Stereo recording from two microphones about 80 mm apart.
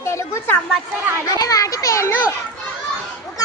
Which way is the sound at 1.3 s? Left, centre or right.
Left.